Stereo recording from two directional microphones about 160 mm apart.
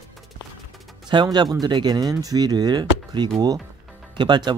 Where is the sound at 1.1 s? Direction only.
25° right (ahead or behind).